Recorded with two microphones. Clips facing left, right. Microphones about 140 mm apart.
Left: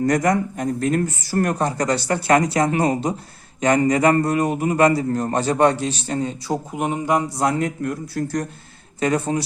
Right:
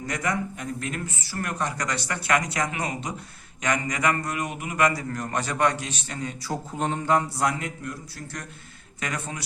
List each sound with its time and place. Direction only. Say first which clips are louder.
0.0 s speech: left 10 dB; 45° left (ahead or behind)
6.5 s speech: left 3 dB; 15° left (ahead or behind)
7.9 s speech: left 12 dB; 45° left (ahead or behind)
9.0 s speech: left 12 dB; 30° left (ahead or behind)